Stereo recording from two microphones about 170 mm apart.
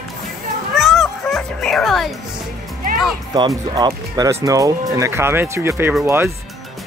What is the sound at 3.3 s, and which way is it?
Speech, 25° right (ahead or behind).